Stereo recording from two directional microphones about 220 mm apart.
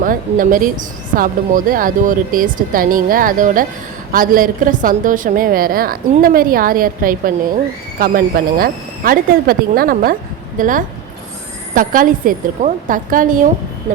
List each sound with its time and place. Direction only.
0.0 s a woman's voice: 40° right (ahead or behind)